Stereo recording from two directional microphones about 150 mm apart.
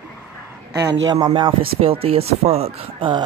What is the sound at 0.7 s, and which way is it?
Speech, 25° right (ahead or behind).